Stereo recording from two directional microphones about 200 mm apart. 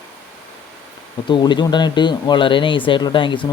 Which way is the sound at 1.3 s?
20° left (ahead or behind).